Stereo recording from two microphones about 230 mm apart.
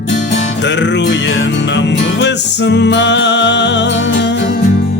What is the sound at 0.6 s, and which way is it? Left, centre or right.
Music, left.